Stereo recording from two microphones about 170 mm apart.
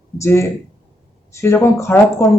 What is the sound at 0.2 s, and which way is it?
Speech, 15° left (ahead or behind).